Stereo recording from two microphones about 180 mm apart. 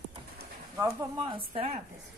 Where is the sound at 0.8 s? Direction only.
20° right (ahead or behind).